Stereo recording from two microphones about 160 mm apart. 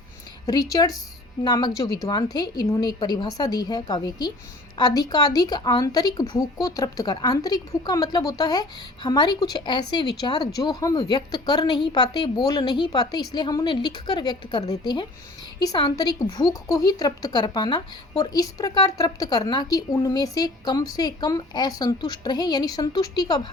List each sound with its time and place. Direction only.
0.4 s a woman's voice: 20° left (ahead or behind)
15.6 s a woman's voice: 25° left (ahead or behind)